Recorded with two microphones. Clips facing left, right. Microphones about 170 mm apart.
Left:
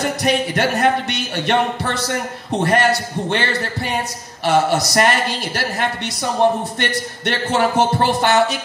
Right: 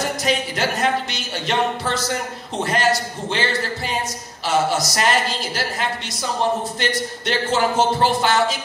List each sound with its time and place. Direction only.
0.2 s speech: 60° left (ahead or behind)
6.8 s speech: 60° left (ahead or behind)